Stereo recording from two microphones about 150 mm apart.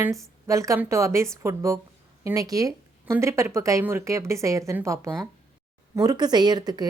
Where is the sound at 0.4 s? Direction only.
20° right (ahead or behind).